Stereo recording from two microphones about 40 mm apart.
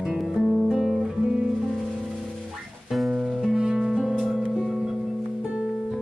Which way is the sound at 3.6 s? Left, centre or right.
Centre.